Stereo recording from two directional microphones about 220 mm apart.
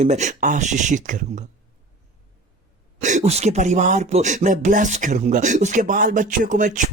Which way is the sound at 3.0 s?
35° right (ahead or behind).